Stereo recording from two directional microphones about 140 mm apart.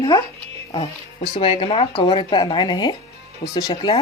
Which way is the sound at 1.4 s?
40° left (ahead or behind).